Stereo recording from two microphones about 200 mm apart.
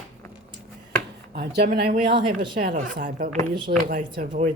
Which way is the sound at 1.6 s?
35° right (ahead or behind).